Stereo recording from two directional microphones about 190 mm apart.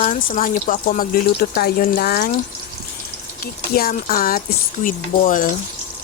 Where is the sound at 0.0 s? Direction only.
40° left (ahead or behind).